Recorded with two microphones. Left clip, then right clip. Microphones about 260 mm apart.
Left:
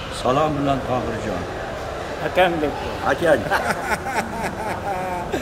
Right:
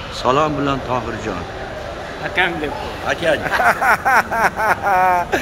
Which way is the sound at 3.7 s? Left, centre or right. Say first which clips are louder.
Right 9 dB; centre.